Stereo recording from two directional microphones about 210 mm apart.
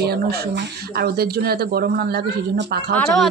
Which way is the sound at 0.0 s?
50° right (ahead or behind).